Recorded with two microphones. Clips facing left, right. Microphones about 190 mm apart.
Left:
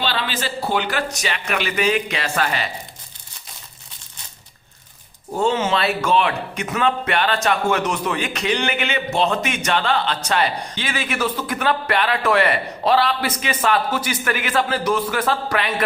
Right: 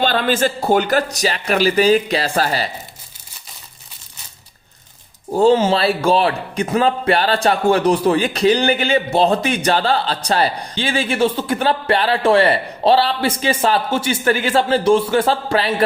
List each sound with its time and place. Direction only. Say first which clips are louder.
0.0 s speech: right 8 dB; 50° right (ahead or behind)
5.3 s speech: right 6 dB; 35° right (ahead or behind)